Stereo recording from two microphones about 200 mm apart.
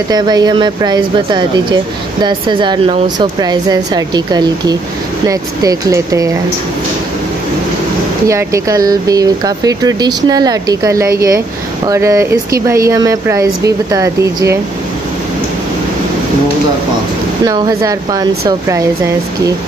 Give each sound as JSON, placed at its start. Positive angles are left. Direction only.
{"t": 0.1, "sound": "speech", "side_deg": -20}
{"t": 8.3, "sound": "speech", "side_deg": -15}
{"t": 17.5, "sound": "speech", "side_deg": -15}